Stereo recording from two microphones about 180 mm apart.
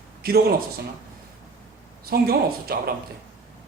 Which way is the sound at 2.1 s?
55° right (ahead or behind).